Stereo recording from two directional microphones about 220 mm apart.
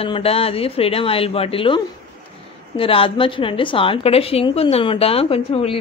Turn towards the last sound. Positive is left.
turn(degrees=25)  # may be behind; listen again after turning